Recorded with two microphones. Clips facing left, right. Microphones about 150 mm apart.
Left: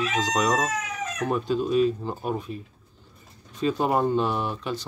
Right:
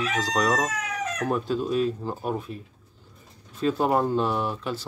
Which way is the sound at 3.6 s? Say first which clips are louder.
Even; centre (ahead or behind).